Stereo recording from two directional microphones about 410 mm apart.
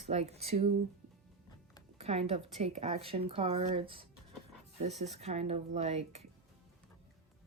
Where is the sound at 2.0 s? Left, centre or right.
Centre.